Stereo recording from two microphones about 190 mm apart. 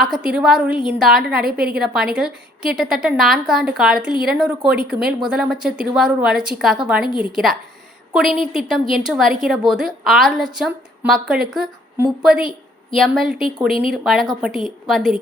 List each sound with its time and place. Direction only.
0.0 s a woman's voice: centre (ahead or behind)